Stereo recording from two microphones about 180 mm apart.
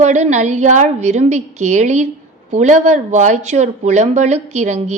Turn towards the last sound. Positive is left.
turn(degrees=-40)  # may be behind; listen again after turning